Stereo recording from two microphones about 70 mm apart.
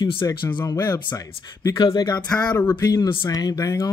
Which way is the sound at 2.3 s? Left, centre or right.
Left.